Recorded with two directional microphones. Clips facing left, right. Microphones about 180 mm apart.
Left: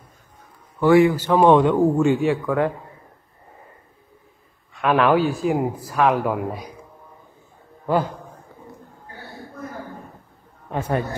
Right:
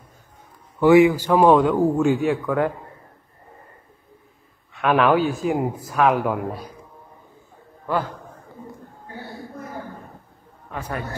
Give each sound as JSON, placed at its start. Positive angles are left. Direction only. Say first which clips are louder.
{"t": 0.7, "sound": "a man's voice", "louder": "right 1 dB", "side_deg": -15}
{"t": 1.4, "sound": "a man's voice", "louder": "left 1 dB", "side_deg": 0}
{"t": 4.7, "sound": "a man's voice", "louder": "even", "side_deg": 0}
{"t": 7.8, "sound": "a man's voice", "louder": "left 3 dB", "side_deg": 15}
{"t": 10.7, "sound": "a man's voice", "louder": "left 6 dB", "side_deg": 25}